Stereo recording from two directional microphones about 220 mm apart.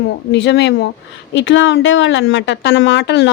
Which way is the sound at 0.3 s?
50° left (ahead or behind).